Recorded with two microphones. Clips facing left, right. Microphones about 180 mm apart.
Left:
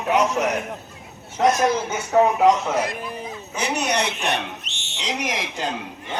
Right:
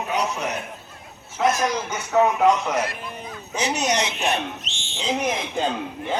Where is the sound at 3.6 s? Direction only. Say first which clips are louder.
Even; 60° left (ahead or behind); by 5.7 s 80° left.